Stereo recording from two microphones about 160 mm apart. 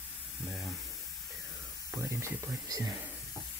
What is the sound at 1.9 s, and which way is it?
Speech, 20° right (ahead or behind).